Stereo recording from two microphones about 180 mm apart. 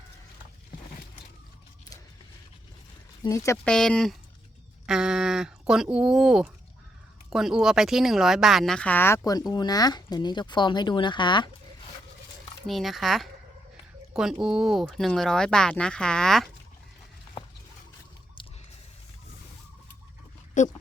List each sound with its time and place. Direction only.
3.2 s speech: 15° left (ahead or behind)
3.6 s speech: 5° left (ahead or behind); by 11.5 s 25° left (ahead or behind)
12.6 s speech: centre (ahead or behind)
14.4 s speech: centre (ahead or behind)
18.4 s squish: 25° left (ahead or behind)
20.6 s speech: 45° left (ahead or behind)